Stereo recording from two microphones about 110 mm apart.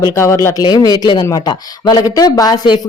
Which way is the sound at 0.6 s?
35° left (ahead or behind).